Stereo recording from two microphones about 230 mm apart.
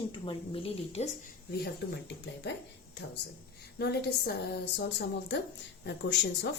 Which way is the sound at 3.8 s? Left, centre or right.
Left.